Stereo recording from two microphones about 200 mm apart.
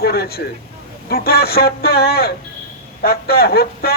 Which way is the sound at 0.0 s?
50° left (ahead or behind).